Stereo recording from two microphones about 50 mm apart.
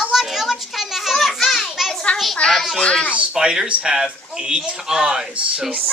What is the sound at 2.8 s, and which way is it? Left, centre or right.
Speech, left.